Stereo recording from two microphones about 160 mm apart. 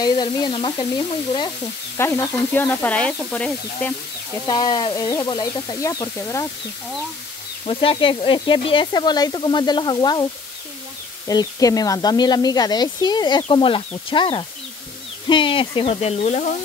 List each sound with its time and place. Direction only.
0.0 s speech: 25° left (ahead or behind)
2.0 s sizzle: 15° left (ahead or behind)
4.5 s speech: 25° left (ahead or behind)
7.6 s speech: 35° left (ahead or behind)
11.2 s speech: 20° left (ahead or behind); by 16.4 s 40° left (ahead or behind)